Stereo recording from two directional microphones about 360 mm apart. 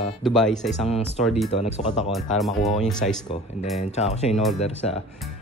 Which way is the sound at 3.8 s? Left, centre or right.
Centre.